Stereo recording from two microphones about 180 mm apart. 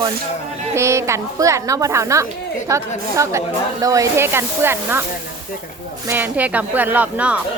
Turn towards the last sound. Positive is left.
turn(degrees=-10)  # may be behind; listen again after turning